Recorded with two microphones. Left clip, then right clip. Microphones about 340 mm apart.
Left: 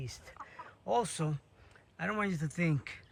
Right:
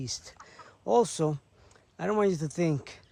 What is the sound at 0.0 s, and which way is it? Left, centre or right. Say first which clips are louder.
Speech: right 8 dB; centre.